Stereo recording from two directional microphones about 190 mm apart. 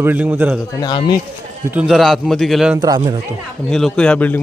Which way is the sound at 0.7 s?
25° left (ahead or behind).